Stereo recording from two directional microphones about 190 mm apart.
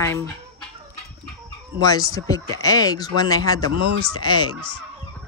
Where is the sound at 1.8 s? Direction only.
20° left (ahead or behind).